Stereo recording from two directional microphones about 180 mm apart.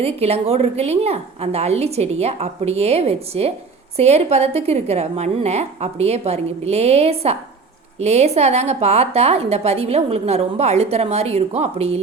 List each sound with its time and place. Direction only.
0.0 s a woman's voice: 35° right (ahead or behind)